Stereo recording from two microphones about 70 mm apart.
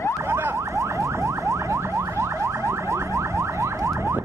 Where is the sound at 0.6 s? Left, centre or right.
Right.